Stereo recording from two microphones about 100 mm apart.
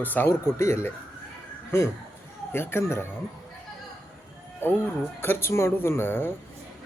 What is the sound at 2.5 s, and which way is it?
Speech, 25° left (ahead or behind).